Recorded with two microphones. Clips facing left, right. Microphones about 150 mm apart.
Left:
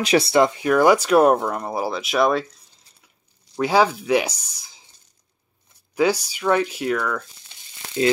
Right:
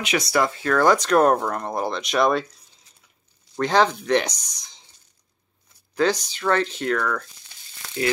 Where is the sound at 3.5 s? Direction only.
10° left (ahead or behind).